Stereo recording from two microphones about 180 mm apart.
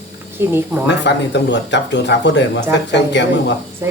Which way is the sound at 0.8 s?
75° left (ahead or behind).